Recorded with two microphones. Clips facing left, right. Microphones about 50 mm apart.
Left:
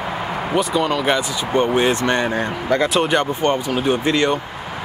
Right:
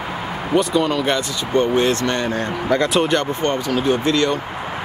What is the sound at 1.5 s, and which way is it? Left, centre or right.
Speech, centre.